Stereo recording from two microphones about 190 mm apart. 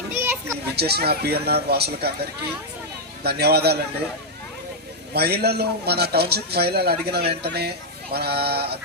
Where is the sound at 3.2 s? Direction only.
55° right (ahead or behind).